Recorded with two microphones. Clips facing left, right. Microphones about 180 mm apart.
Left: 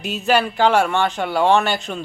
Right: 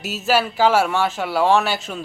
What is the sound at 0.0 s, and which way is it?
Speech, 5° right (ahead or behind).